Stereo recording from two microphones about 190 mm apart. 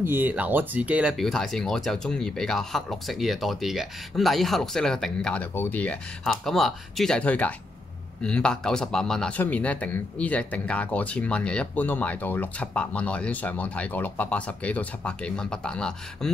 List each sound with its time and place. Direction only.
0.0 s speech: 10° right (ahead or behind)